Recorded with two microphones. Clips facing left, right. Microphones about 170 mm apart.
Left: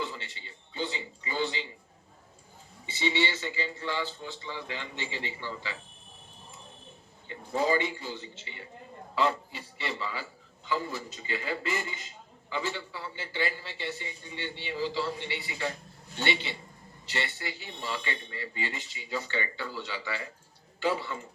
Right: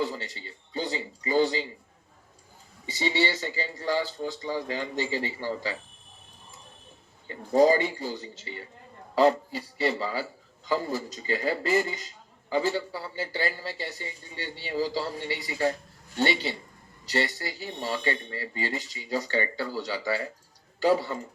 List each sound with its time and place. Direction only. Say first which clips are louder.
0.0 s a sound: right 6 dB; 40° right (ahead or behind)
2.8 s a man's voice: right 3 dB; 40° right (ahead or behind)
7.3 s a man's voice: right 8 dB; 40° right (ahead or behind)